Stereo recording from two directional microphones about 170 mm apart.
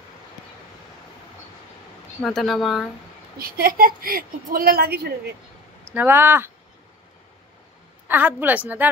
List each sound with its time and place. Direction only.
2.2 s speech: centre (ahead or behind)
3.3 s a woman's voice: 60° right (ahead or behind)
5.9 s a woman's voice: 10° right (ahead or behind)
8.1 s a woman's voice: 10° right (ahead or behind)